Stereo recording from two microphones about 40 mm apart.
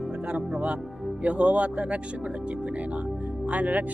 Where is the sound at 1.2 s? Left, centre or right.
Right.